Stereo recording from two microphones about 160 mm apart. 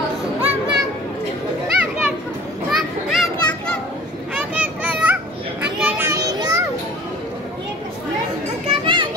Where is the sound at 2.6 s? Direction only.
Centre (ahead or behind).